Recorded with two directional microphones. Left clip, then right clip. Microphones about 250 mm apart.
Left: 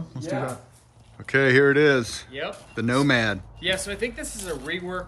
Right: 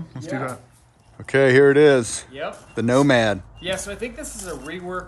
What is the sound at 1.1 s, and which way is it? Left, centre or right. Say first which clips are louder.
Speech: right 3 dB; centre.